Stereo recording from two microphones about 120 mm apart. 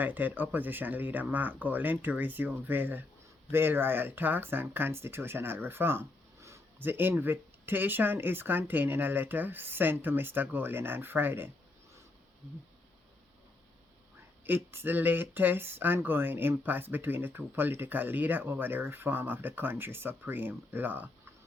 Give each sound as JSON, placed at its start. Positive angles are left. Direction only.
{"t": 0.0, "sound": "speech", "side_deg": -15}
{"t": 14.4, "sound": "speech", "side_deg": -20}